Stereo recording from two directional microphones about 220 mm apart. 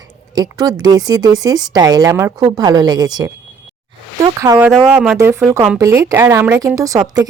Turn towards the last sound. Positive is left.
turn(degrees=-15)  # may be behind; listen again after turning